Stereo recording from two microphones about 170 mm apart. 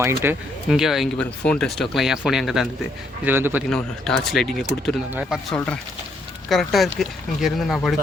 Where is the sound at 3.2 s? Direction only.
10° right (ahead or behind).